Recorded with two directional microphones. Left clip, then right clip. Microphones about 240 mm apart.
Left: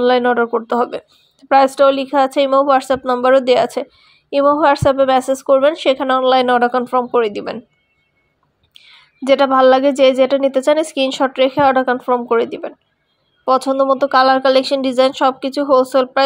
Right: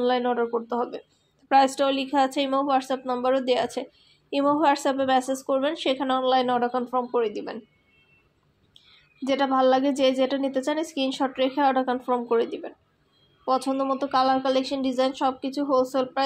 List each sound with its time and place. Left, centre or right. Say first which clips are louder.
0.0 s speech: left 10 dB; left
8.7 s speech: left 9 dB; left